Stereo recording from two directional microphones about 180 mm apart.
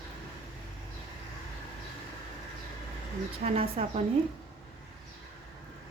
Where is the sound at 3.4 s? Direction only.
35° right (ahead or behind).